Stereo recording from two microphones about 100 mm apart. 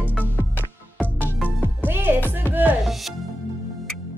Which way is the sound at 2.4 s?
20° left (ahead or behind).